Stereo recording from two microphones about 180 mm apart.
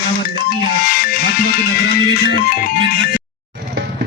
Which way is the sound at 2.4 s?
55° left (ahead or behind).